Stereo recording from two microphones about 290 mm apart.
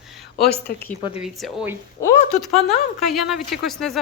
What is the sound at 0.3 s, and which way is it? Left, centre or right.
Speech, left.